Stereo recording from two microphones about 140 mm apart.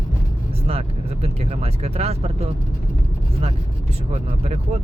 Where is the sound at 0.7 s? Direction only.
45° right (ahead or behind).